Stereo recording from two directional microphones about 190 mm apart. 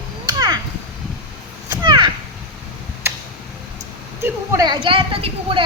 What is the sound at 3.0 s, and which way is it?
Tick-tock, 15° right (ahead or behind).